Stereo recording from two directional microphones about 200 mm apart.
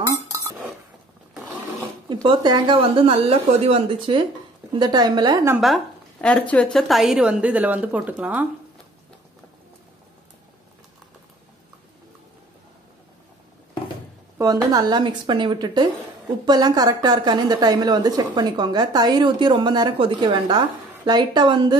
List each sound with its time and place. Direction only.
0.0 s chink: 15° right (ahead or behind)
2.2 s a woman's voice: 20° right (ahead or behind)
6.2 s a woman's voice: 5° left (ahead or behind)
14.4 s a woman's voice: 20° right (ahead or behind)